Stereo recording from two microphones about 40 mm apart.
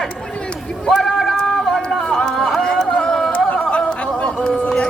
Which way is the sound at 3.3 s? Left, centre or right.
Left.